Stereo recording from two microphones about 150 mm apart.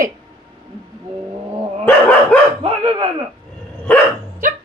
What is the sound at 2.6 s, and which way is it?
Speech, 40° right (ahead or behind).